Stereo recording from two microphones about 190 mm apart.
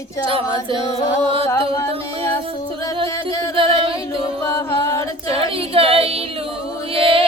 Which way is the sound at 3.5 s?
25° right (ahead or behind).